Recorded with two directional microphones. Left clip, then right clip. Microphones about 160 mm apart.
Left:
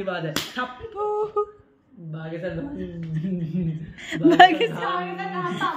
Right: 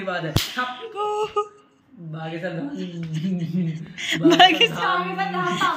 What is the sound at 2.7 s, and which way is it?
A woman's voice, 20° left (ahead or behind).